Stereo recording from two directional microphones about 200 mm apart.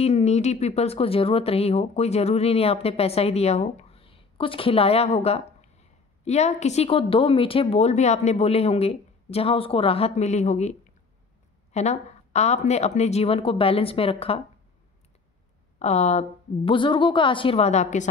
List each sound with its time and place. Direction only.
0.0 s a woman's voice: 35° left (ahead or behind)
15.8 s a woman's voice: 35° left (ahead or behind)